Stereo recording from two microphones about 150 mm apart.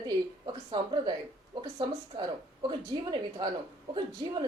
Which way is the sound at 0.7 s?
30° right (ahead or behind).